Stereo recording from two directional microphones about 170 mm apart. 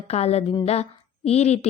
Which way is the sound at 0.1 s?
40° left (ahead or behind).